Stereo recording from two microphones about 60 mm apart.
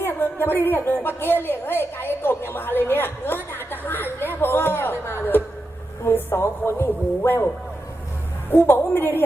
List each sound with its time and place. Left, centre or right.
0.0 s a sound: left
6.1 s a woman's voice: left
8.4 s a woman's voice: left